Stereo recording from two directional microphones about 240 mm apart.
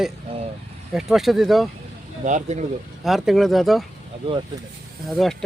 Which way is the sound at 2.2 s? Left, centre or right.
Right.